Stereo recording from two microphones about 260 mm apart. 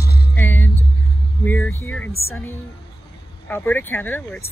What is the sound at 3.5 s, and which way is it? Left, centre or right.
Speech, centre.